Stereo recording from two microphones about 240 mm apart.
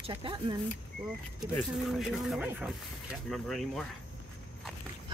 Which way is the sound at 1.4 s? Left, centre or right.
Centre.